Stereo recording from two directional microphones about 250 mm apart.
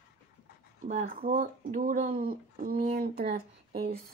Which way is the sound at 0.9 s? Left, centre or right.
Right.